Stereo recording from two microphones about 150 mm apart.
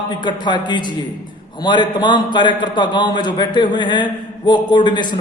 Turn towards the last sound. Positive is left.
turn(degrees=30)  # may be behind; listen again after turning